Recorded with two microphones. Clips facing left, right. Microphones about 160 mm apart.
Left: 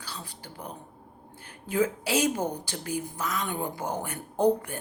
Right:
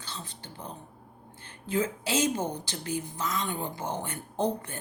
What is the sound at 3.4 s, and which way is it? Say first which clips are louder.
Speech: left 2 dB; 10° left (ahead or behind).